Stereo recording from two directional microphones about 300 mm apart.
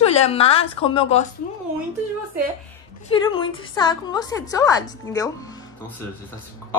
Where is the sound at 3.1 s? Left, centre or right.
Centre.